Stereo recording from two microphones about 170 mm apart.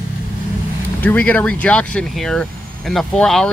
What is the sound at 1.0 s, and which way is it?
Speech, 10° left (ahead or behind).